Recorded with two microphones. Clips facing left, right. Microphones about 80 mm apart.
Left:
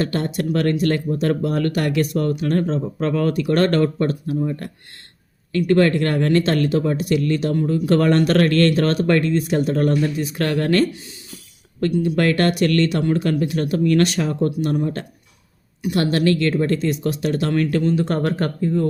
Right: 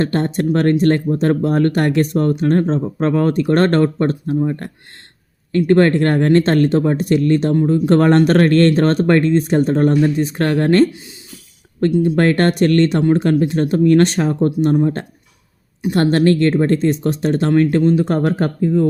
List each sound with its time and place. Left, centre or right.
0.0 s speech: right
18.1 s speech: centre